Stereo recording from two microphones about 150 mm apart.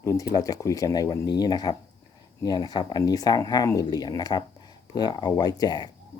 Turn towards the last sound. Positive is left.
turn(degrees=25)  # may be behind; listen again after turning